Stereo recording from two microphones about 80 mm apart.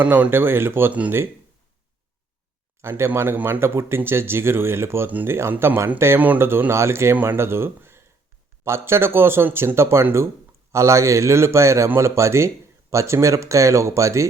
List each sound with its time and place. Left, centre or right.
0.0 s speech: centre
3.0 s speech: right